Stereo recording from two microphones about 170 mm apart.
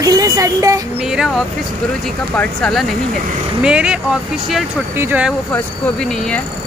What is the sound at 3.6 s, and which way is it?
Speech, 5° right (ahead or behind).